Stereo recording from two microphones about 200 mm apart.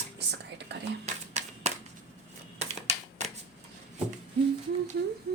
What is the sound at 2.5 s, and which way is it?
Typewriter, 35° right (ahead or behind).